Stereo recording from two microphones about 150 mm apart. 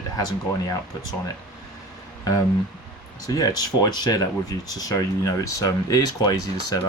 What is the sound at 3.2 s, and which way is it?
Speech, 25° left (ahead or behind).